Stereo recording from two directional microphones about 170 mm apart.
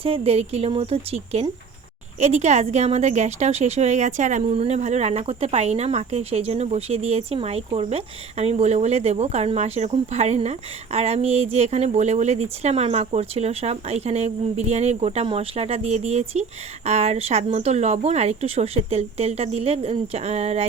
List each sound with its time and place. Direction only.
0.0 s a woman's voice: 35° right (ahead or behind)